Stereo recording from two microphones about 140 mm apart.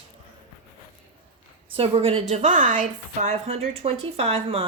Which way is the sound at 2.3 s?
60° right (ahead or behind).